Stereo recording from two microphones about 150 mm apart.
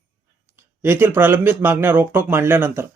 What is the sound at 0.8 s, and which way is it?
Speech, 15° right (ahead or behind).